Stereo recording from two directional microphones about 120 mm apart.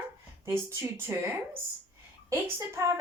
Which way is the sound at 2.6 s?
20° right (ahead or behind).